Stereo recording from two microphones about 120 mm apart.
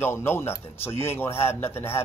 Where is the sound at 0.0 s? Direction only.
20° left (ahead or behind).